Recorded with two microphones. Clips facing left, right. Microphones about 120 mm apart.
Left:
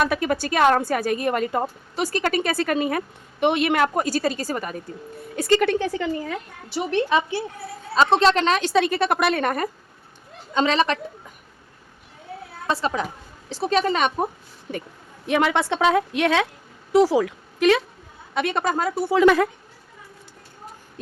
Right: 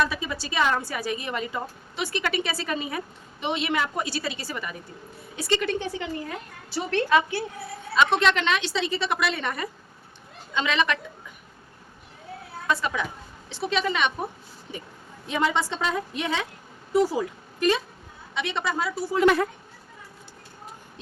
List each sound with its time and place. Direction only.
0.0 s a woman's voice: 55° left (ahead or behind)
6.7 s a woman's voice: 15° left (ahead or behind); by 9.6 s 50° left (ahead or behind)
10.5 s a woman's voice: 40° left (ahead or behind)
12.6 s a woman's voice: 35° left (ahead or behind)
15.3 s a woman's voice: 65° left (ahead or behind)
16.9 s a woman's voice: 85° left
18.3 s a woman's voice: 50° left (ahead or behind)